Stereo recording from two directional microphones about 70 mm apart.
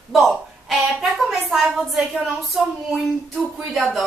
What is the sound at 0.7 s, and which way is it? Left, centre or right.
A woman's voice, centre.